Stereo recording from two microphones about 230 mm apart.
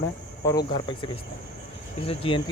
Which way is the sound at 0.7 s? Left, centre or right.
Centre.